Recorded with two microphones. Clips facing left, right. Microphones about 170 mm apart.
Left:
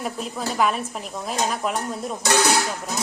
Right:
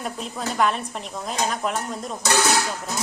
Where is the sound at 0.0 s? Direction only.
5° left (ahead or behind).